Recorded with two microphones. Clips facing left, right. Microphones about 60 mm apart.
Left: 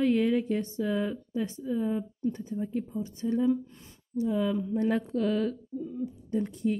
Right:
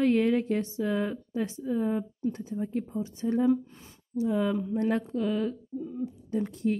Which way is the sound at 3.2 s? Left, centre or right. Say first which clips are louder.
Right 2 dB; right.